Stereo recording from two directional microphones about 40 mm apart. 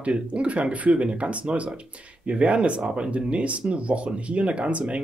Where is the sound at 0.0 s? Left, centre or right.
Right.